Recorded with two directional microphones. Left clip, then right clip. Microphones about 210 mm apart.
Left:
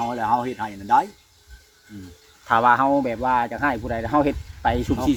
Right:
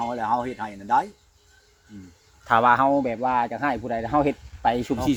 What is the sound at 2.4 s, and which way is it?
Speech, 25° right (ahead or behind).